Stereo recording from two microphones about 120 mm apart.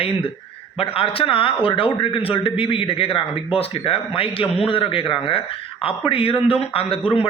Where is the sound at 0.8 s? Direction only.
50° left (ahead or behind).